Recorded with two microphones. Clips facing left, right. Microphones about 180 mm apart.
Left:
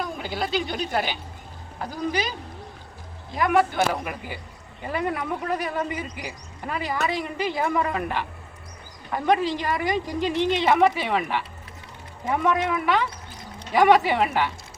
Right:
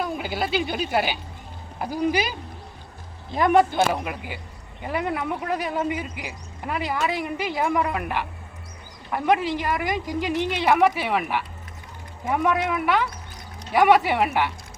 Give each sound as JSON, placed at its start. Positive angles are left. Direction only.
{"t": 0.0, "sound": "a woman's voice", "side_deg": -5}
{"t": 3.3, "sound": "a man's voice", "side_deg": -25}